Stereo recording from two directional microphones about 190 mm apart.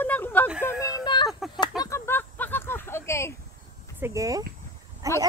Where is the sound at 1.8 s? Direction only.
15° left (ahead or behind).